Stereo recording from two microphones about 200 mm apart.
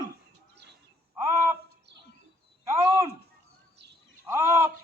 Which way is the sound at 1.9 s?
60° right (ahead or behind).